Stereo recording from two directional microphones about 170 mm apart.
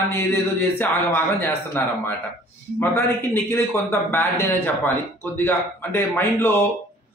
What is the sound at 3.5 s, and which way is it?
Speech, 15° left (ahead or behind).